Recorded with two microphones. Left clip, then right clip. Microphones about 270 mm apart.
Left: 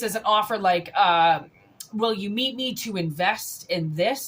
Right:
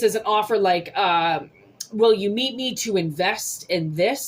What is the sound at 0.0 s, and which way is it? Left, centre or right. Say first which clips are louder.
A woman's voice: right 2 dB; left.